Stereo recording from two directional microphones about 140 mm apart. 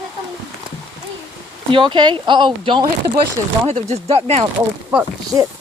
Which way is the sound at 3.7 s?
50° right (ahead or behind).